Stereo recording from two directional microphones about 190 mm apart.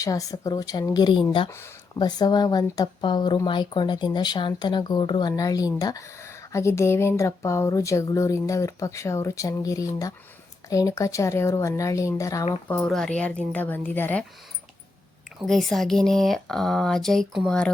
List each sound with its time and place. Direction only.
0.0 s a woman's voice: 15° left (ahead or behind)
12.6 s a woman's voice: 5° left (ahead or behind)
15.4 s speech: centre (ahead or behind)